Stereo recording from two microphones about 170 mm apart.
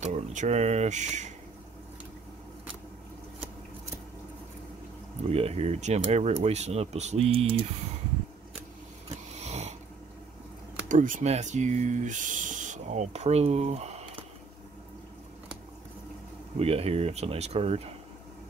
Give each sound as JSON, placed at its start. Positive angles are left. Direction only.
{"t": 0.0, "sound": "speech", "side_deg": -45}
{"t": 5.3, "sound": "speech", "side_deg": -35}
{"t": 9.3, "sound": "a sound", "side_deg": -40}
{"t": 10.9, "sound": "speech", "side_deg": -50}
{"t": 16.5, "sound": "speech", "side_deg": -35}